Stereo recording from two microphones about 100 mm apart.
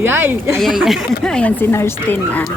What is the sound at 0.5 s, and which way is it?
Speech, centre (ahead or behind).